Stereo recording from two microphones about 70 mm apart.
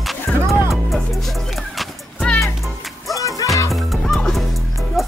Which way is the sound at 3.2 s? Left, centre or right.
Left.